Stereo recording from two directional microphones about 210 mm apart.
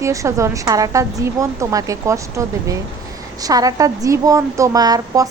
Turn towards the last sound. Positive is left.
turn(degrees=-20)  # may be behind; listen again after turning